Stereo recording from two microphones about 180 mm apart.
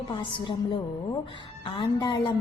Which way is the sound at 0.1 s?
25° left (ahead or behind).